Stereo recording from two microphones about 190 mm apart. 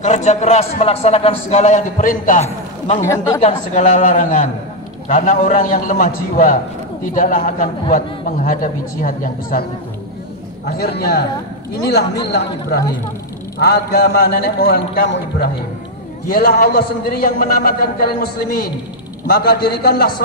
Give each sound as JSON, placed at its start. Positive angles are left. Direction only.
{"t": 0.0, "sound": "a man's voice", "side_deg": 35}
{"t": 3.0, "sound": "speech", "side_deg": 15}
{"t": 3.4, "sound": "a man's voice", "side_deg": 40}
{"t": 9.0, "sound": "a man's voice", "side_deg": 50}
{"t": 10.7, "sound": "a man's voice", "side_deg": 55}